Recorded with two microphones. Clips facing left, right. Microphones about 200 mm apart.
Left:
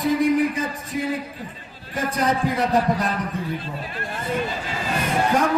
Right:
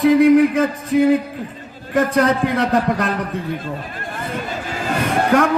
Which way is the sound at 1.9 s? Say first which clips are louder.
Right 7 dB; 65° right (ahead or behind).